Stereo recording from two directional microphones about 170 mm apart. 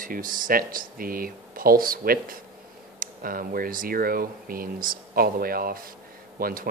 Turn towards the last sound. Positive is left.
turn(degrees=-60)  # may be behind; listen again after turning